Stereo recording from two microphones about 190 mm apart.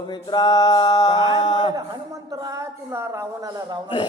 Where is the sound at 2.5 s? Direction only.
15° right (ahead or behind).